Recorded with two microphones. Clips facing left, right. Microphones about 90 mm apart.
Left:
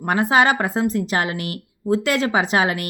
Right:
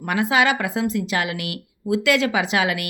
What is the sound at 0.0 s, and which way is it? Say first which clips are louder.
A woman's voice: left 2 dB; 40° left (ahead or behind).